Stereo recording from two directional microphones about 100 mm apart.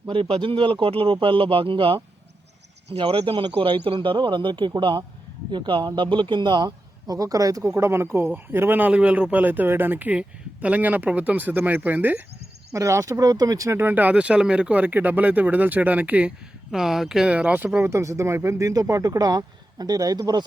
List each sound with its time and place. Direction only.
0.1 s speech: 60° right (ahead or behind)
3.0 s a man's voice: 65° right (ahead or behind); by 12.2 s 20° right (ahead or behind)
12.7 s speech: 30° right (ahead or behind)
13.7 s a man's voice: 20° right (ahead or behind)
16.7 s speech: 5° right (ahead or behind); by 20.4 s 40° right (ahead or behind)